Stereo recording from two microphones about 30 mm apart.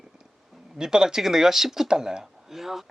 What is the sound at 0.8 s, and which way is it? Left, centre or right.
Speech, right.